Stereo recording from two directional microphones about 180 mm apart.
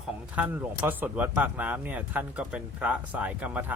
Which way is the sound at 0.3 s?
10° right (ahead or behind).